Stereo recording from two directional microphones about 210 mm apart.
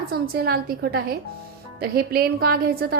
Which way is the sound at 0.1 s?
45° right (ahead or behind).